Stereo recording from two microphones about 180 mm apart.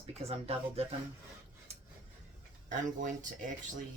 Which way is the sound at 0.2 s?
35° right (ahead or behind).